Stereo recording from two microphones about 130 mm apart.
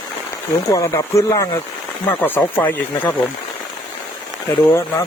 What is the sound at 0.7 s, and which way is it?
Speech, 25° left (ahead or behind).